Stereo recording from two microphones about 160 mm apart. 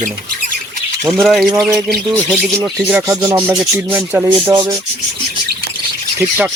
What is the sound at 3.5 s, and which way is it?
Speech, 5° right (ahead or behind).